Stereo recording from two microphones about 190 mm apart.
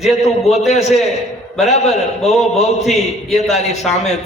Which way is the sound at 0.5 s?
35° left (ahead or behind).